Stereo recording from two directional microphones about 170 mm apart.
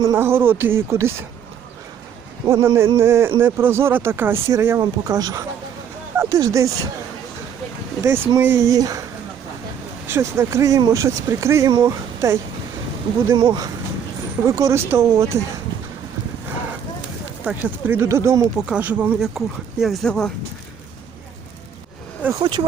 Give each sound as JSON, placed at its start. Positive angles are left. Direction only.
{"t": 0.0, "sound": "speech", "side_deg": -15}
{"t": 2.5, "sound": "speech", "side_deg": -15}
{"t": 8.0, "sound": "speech", "side_deg": -15}
{"t": 10.1, "sound": "speech", "side_deg": -15}
{"t": 17.4, "sound": "speech", "side_deg": -10}
{"t": 18.6, "sound": "speech", "side_deg": -10}
{"t": 22.2, "sound": "speech", "side_deg": -15}